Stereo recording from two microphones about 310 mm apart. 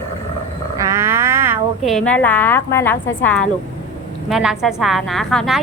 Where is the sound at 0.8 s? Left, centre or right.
Centre.